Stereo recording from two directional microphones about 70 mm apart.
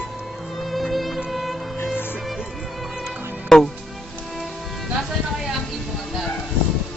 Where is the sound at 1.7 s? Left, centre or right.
Left.